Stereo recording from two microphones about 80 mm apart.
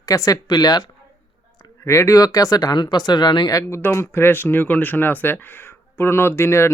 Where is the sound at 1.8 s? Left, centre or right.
Left.